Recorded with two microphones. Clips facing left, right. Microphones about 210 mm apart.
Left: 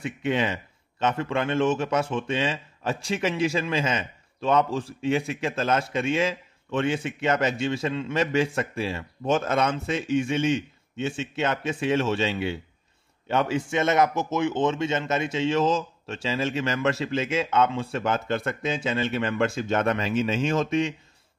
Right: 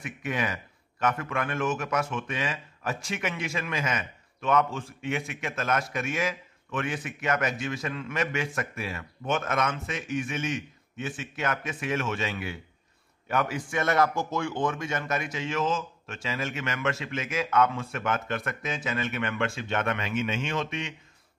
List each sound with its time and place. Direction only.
0.0 s a man's voice: 25° left (ahead or behind)